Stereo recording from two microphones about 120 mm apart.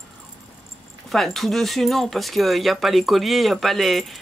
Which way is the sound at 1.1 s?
Centre (ahead or behind).